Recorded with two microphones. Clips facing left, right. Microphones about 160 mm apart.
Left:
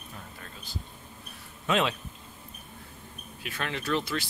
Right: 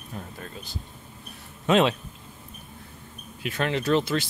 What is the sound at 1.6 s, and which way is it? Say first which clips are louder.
Speech: right 6 dB; 25° right (ahead or behind).